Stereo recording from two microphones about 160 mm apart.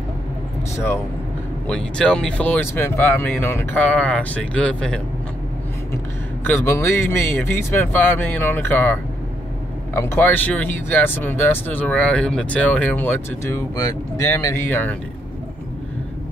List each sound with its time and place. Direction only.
1.7 s speech: 5° left (ahead or behind)
6.4 s speech: 15° left (ahead or behind)